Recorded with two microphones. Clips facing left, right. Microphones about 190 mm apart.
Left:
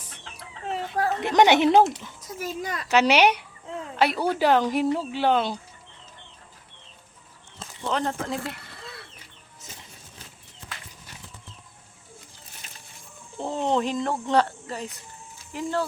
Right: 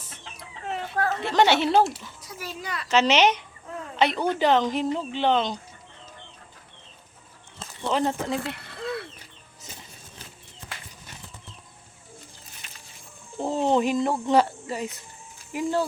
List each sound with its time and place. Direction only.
0.7 s a sound: 35° left (ahead or behind)
1.1 s a woman's voice: 15° left (ahead or behind)
2.2 s a child's voice: 45° left (ahead or behind)
2.9 s a woman's voice: 10° left (ahead or behind)
7.9 s speech: 5° right (ahead or behind)
12.6 s a sound: 35° left (ahead or behind)
13.4 s speech: 5° right (ahead or behind)